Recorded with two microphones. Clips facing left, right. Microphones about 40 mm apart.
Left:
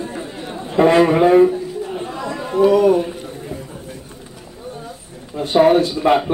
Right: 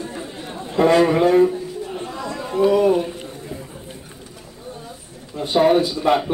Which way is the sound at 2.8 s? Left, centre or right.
Centre.